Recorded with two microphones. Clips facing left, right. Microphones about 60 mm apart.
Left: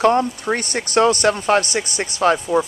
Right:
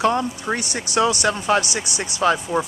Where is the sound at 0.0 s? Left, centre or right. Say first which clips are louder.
Left 4 dB; left.